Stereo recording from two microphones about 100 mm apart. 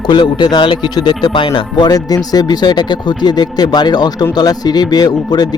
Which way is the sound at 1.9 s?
40° left (ahead or behind).